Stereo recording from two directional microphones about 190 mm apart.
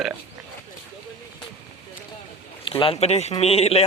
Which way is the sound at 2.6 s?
25° left (ahead or behind).